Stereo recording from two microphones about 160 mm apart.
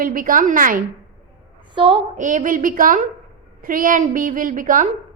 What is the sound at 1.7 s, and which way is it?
Speech, 30° right (ahead or behind).